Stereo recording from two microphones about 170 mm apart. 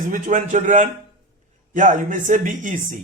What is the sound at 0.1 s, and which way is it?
Speech, 50° right (ahead or behind).